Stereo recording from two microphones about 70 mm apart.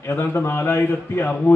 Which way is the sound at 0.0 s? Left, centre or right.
Left.